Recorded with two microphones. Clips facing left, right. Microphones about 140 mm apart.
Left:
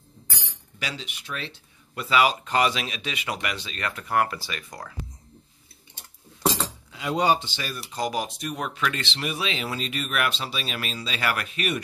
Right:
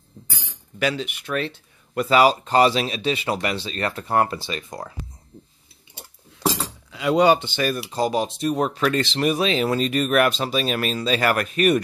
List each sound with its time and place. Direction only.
0.7 s speech: 55° right (ahead or behind); by 4.9 s 25° right (ahead or behind)
6.9 s speech: 85° right; by 7.8 s 55° right (ahead or behind)
7.9 s speech: 30° right (ahead or behind); by 11.8 s 45° right (ahead or behind)